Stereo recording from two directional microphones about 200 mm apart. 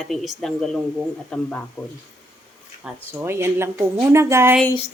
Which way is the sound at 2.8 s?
10° right (ahead or behind).